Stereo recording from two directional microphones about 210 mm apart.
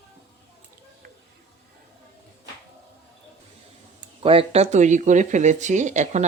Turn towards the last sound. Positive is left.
turn(degrees=-35)  # may be behind; listen again after turning